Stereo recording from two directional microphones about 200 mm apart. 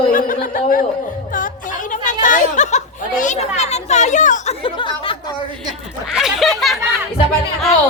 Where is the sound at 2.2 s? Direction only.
40° left (ahead or behind).